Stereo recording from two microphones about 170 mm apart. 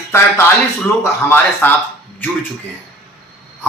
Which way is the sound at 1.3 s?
10° left (ahead or behind).